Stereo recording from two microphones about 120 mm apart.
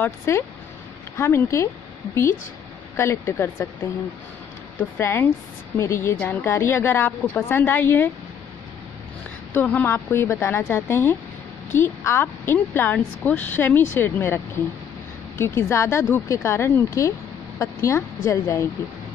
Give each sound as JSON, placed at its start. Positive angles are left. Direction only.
{"t": 0.0, "sound": "speech", "side_deg": 20}
{"t": 3.0, "sound": "speech", "side_deg": 20}
{"t": 4.7, "sound": "a woman's voice", "side_deg": 20}
{"t": 9.5, "sound": "a woman's voice", "side_deg": 15}